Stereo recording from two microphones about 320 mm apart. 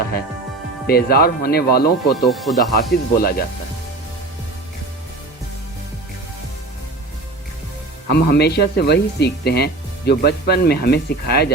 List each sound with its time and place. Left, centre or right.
0.9 s speech: left
2.3 s speech: centre
2.7 s speech: left
8.1 s speech: left